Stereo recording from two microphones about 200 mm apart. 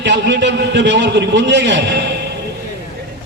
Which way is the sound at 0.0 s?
60° right (ahead or behind).